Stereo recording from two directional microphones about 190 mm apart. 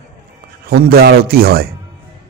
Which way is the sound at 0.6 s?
55° right (ahead or behind).